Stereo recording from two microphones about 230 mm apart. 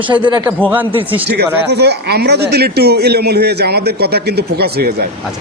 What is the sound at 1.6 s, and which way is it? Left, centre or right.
A man's voice, right.